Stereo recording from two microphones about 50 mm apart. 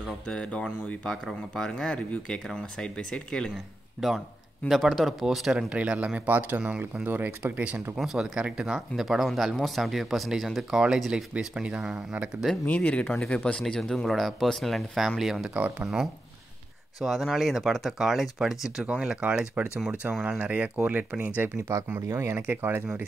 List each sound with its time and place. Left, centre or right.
0.3 s speech: left
4.6 s speech: centre
5.7 s speech: right
6.2 s speech: right
7.5 s speech: right
8.0 s speech: centre
10.7 s speech: centre
12.6 s speech: left
13.0 s speech: centre
17.0 s speech: centre
18.9 s speech: right
22.0 s speech: right
22.5 s speech: right